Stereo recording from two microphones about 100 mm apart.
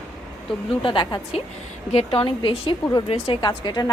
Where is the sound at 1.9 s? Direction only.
75° left (ahead or behind).